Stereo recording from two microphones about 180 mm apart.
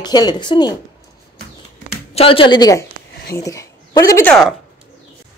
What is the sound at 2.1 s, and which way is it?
A woman's voice, 30° left (ahead or behind).